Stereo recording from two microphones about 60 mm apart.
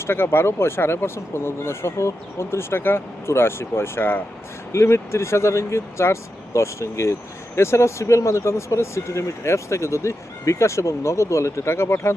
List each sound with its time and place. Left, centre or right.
0.0 s speech: left